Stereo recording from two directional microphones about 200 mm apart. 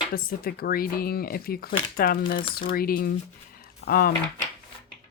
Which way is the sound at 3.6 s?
50° left (ahead or behind).